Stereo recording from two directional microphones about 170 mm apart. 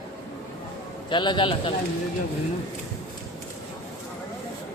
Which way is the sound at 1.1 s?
30° left (ahead or behind).